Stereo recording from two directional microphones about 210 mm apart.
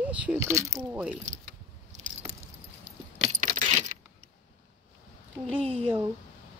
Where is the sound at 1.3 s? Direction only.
35° right (ahead or behind).